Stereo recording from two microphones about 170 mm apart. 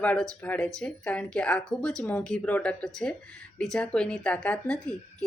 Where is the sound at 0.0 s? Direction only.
10° left (ahead or behind).